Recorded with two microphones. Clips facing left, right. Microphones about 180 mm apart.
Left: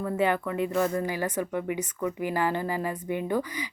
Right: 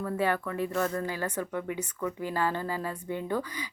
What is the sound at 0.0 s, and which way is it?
Speech, 20° left (ahead or behind).